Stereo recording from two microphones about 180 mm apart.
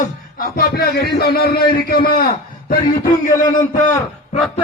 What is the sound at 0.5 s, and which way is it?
A man's voice, 60° left (ahead or behind).